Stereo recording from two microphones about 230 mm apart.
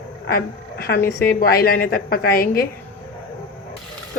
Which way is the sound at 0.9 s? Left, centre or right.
Left.